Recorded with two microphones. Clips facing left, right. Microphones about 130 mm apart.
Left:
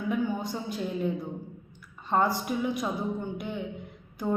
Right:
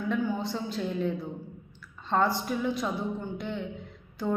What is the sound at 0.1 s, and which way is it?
A woman's voice, 15° left (ahead or behind).